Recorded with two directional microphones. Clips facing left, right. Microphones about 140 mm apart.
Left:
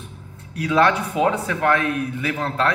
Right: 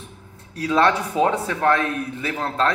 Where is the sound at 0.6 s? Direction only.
30° right (ahead or behind).